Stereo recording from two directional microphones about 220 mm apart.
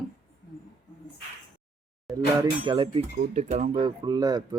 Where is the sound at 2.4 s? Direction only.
20° right (ahead or behind).